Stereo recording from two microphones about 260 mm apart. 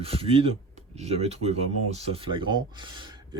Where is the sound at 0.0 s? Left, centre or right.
Right.